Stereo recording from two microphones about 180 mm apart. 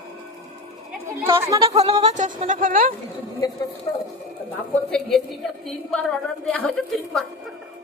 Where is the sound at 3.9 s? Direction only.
15° left (ahead or behind).